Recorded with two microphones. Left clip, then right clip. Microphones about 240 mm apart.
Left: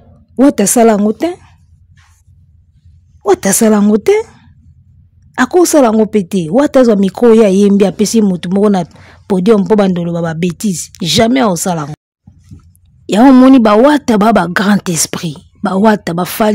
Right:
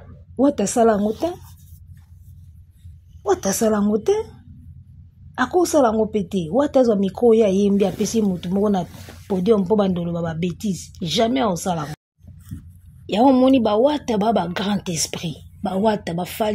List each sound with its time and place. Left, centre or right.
0.4 s speech: left
3.2 s speech: left
5.3 s speech: left
13.0 s speech: left